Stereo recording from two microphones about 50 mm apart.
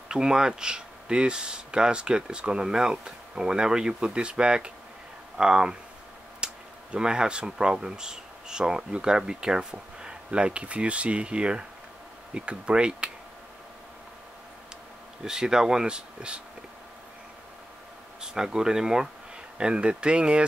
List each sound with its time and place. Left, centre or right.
0.1 s speech: centre
15.2 s speech: centre
18.2 s speech: centre